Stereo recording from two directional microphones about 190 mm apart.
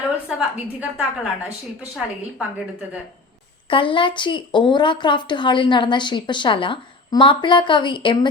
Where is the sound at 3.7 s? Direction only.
25° left (ahead or behind).